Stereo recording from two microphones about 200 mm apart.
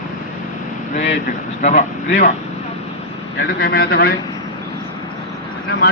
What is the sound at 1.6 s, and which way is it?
Speech, 40° left (ahead or behind).